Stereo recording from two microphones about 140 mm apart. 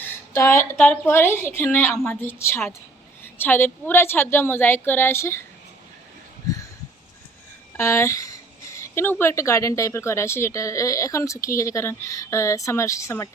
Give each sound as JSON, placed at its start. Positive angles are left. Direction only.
{"t": 0.0, "sound": "a woman's voice", "side_deg": 20}
{"t": 7.8, "sound": "speech", "side_deg": 20}